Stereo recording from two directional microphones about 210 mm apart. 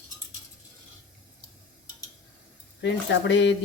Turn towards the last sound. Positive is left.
turn(degrees=55)  # may be behind; listen again after turning